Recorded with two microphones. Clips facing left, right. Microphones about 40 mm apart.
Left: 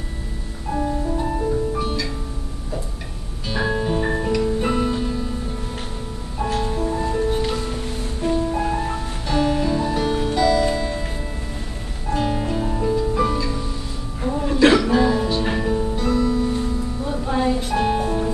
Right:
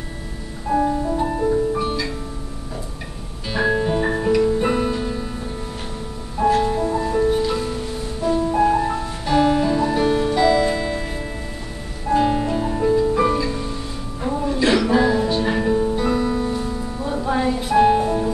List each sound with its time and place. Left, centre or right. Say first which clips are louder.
0.7 s music: right 4 dB; centre
3.4 s music: right 3 dB; centre
6.6 s music: right 3 dB; centre
8.2 s music: right 2 dB; left
8.5 s music: right 6 dB; centre
14.2 s a sound: even; centre
14.8 s music: right 1 dB; centre